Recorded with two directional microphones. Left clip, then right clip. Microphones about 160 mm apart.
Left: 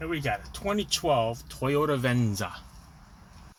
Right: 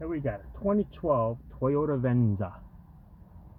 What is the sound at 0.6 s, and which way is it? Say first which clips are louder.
Speech: right 1 dB; 20° right (ahead or behind).